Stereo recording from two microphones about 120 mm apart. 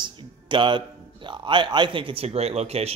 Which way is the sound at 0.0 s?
40° right (ahead or behind).